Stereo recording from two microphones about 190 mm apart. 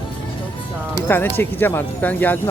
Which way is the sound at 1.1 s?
10° left (ahead or behind).